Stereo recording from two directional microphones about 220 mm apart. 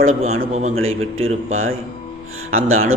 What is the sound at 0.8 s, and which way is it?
A man's voice, 65° right (ahead or behind).